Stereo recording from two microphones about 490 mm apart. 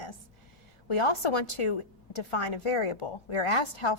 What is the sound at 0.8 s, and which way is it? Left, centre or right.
A woman's voice, left.